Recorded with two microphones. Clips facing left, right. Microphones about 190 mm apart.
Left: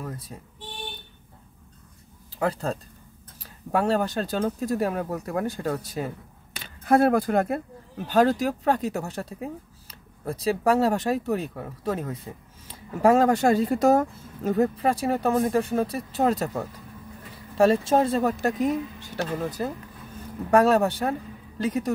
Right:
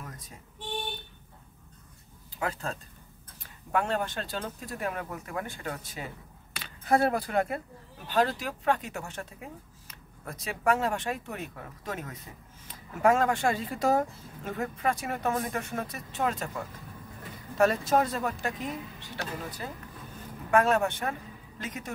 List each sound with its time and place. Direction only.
2.3 s speech: 35° left (ahead or behind)
3.7 s speech: 35° left (ahead or behind)